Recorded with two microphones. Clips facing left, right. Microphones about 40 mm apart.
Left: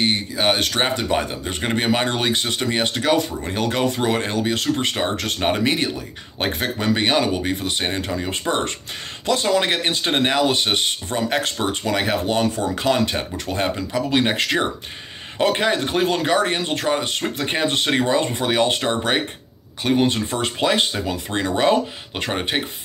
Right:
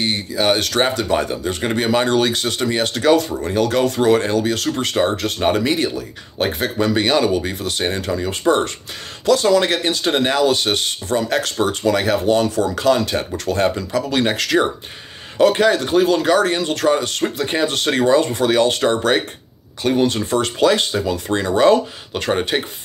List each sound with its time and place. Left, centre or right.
0.0 s speech: left
3.5 s speech: left
3.8 s speech: centre
5.0 s speech: centre
5.4 s speech: left
13.1 s speech: centre
17.4 s speech: left
18.8 s speech: centre
20.4 s speech: left
22.5 s speech: centre